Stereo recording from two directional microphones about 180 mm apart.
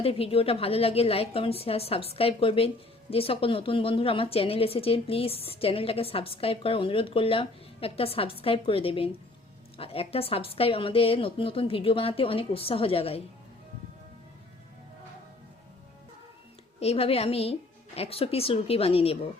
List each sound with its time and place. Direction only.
0.0 s a woman's voice: 30° left (ahead or behind)
16.8 s a woman's voice: 35° left (ahead or behind)